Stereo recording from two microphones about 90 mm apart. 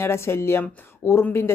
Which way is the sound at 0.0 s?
25° left (ahead or behind).